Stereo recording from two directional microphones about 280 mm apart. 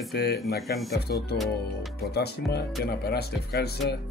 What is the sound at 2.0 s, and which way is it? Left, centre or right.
Speech, left.